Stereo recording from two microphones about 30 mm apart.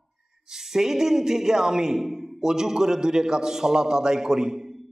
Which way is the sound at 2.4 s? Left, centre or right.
Centre.